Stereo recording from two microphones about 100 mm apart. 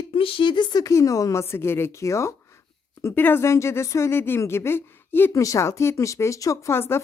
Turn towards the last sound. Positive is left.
turn(degrees=25)  # may be behind; listen again after turning